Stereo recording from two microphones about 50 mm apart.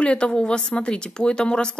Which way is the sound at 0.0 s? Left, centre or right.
Left.